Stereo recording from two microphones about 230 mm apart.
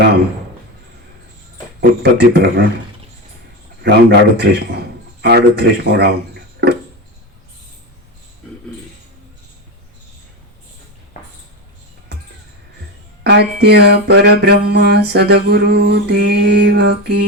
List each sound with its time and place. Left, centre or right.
1.8 s mantra: right
3.8 s mantra: right
13.2 s mantra: right